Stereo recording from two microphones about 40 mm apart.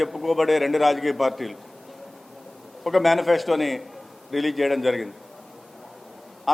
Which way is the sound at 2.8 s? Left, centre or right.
Centre.